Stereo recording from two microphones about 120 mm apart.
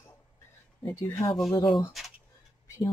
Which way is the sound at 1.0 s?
20° left (ahead or behind).